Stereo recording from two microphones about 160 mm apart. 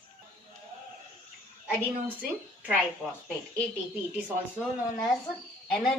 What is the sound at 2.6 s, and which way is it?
Speech, 5° right (ahead or behind).